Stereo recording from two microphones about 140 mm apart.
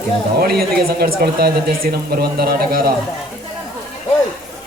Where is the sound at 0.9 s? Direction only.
90° right.